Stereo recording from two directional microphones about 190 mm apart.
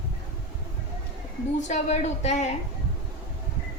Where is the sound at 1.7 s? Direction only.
35° left (ahead or behind).